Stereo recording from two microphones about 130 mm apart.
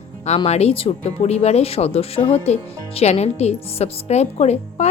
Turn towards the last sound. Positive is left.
turn(degrees=55)  # may be behind; listen again after turning